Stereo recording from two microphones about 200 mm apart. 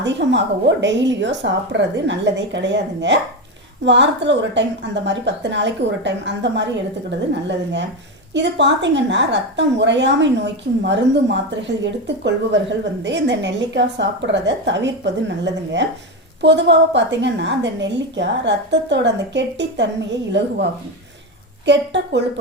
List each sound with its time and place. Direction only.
0.0 s a woman's voice: 65° right (ahead or behind)
21.7 s a woman's voice: 60° right (ahead or behind)